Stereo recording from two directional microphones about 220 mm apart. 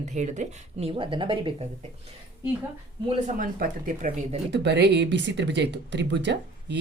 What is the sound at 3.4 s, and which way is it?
Speech, 40° right (ahead or behind).